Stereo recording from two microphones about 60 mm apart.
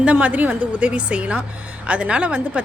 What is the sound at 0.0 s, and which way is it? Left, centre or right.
A woman's voice, right.